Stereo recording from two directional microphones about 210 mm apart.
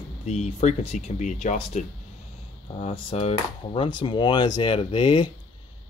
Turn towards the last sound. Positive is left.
turn(degrees=25)  # may be behind; listen again after turning